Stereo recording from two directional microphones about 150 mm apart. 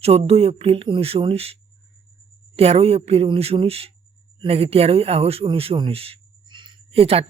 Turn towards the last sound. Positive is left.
turn(degrees=-40)  # may be behind; listen again after turning